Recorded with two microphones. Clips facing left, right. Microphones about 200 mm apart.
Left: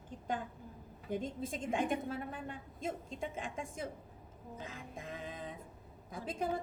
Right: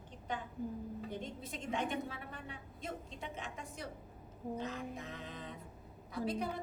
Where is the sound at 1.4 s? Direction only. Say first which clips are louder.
Left 2 dB; 50° left (ahead or behind).